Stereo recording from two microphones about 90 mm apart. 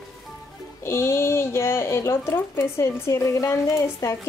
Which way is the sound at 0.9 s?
30° left (ahead or behind).